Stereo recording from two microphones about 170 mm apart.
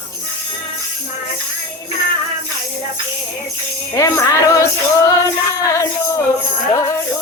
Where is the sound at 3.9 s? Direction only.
20° left (ahead or behind).